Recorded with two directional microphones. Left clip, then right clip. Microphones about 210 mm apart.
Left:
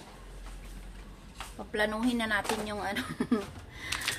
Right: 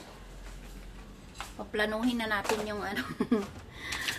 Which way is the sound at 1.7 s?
Centre (ahead or behind).